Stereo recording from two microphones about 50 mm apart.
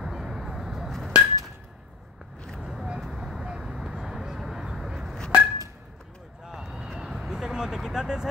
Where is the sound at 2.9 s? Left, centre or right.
Centre.